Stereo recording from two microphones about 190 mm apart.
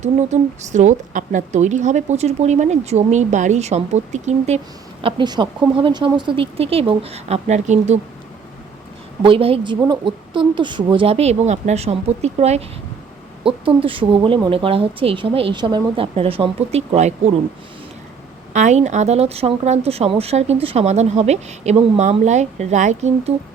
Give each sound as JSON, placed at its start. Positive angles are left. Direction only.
{"t": 0.0, "sound": "speech", "side_deg": -40}
{"t": 5.0, "sound": "a woman's voice", "side_deg": -25}
{"t": 9.2, "sound": "a woman's voice", "side_deg": -30}
{"t": 18.5, "sound": "speech", "side_deg": -40}